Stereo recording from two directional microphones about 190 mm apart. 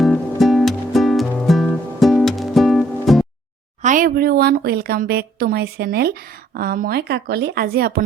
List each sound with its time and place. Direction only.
0.0 s music: centre (ahead or behind)
3.8 s speech: 45° right (ahead or behind)